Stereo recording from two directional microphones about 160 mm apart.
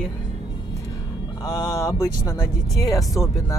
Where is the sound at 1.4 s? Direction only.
20° left (ahead or behind).